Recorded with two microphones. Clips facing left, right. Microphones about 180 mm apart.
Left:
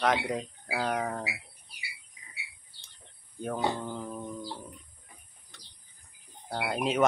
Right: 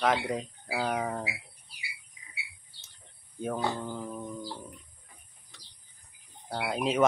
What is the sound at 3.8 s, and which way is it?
Speech, centre (ahead or behind).